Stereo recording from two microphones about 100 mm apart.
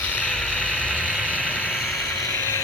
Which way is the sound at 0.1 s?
15° left (ahead or behind).